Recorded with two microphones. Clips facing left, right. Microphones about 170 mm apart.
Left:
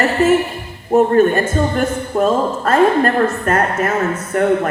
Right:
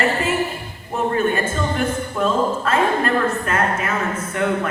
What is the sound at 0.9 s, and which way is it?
A man's voice, 45° left (ahead or behind).